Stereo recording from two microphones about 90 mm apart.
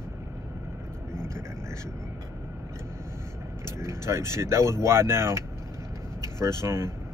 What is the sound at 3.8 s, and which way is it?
Speech, 30° right (ahead or behind).